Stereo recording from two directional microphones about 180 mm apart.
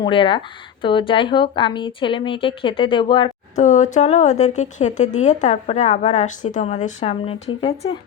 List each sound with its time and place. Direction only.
0.0 s speech: 25° left (ahead or behind)
3.5 s speech: 40° left (ahead or behind)